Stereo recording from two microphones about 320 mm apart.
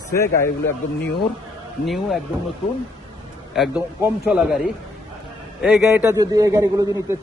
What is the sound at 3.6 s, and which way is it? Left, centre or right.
A man's voice, centre.